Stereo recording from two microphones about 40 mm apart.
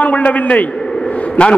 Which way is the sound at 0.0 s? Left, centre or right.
Left.